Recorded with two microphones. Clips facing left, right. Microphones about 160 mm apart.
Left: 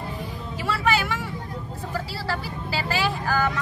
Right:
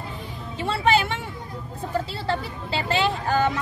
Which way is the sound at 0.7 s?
25° right (ahead or behind).